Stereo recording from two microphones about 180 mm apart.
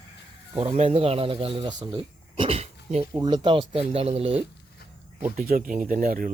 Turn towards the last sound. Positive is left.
turn(degrees=-50)  # may be behind; listen again after turning